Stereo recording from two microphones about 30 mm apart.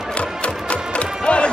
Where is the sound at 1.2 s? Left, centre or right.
Left.